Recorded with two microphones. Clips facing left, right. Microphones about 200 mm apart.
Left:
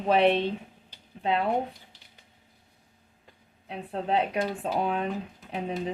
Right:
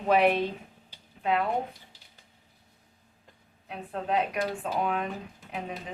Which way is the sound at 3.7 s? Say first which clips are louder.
Left 2 dB; 30° left (ahead or behind).